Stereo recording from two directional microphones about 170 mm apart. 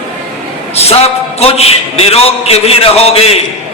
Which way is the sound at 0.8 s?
35° left (ahead or behind).